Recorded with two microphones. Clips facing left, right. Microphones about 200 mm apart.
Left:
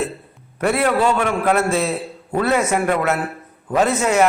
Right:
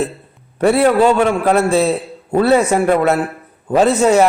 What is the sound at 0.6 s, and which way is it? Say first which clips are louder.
A man's voice: right 6 dB; 30° right (ahead or behind).